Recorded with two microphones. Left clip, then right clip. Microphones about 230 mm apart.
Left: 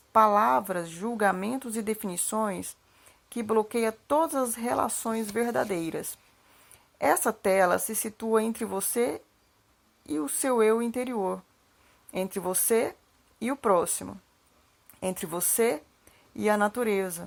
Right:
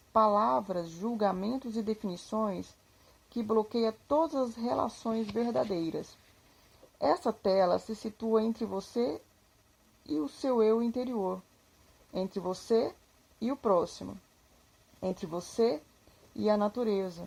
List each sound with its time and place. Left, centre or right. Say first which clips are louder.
0.1 s speech: left 5 dB; left